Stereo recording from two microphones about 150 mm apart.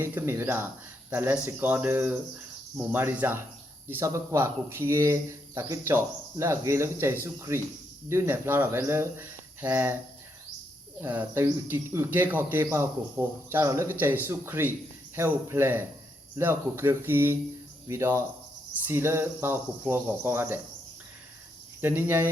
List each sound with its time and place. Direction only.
0.0 s speech: 15° right (ahead or behind)
11.0 s speech: 10° right (ahead or behind)
21.8 s speech: 15° right (ahead or behind)